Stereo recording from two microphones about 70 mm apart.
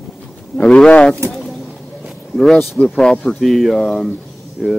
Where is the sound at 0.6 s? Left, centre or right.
Centre.